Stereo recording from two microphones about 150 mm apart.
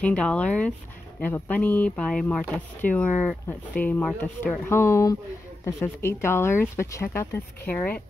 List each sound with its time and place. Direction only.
0.0 s speech: 10° left (ahead or behind)